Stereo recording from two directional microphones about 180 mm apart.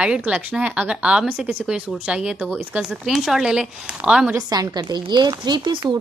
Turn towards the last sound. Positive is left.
turn(degrees=-25)  # may be behind; listen again after turning